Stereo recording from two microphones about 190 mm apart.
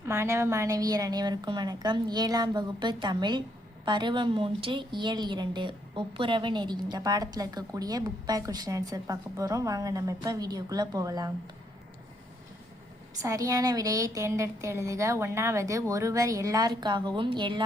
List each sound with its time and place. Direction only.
0.0 s a woman's voice: 15° right (ahead or behind)
13.2 s a woman's voice: 15° right (ahead or behind)